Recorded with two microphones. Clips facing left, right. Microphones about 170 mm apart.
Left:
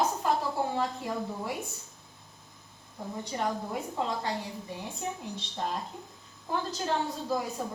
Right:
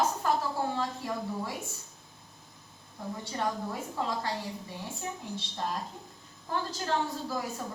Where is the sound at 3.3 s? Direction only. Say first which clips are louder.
Left 1 dB; 20° left (ahead or behind).